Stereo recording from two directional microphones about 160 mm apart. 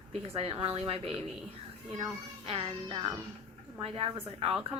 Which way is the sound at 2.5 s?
35° right (ahead or behind).